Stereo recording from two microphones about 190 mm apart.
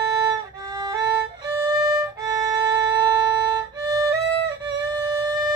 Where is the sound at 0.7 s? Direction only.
20° right (ahead or behind).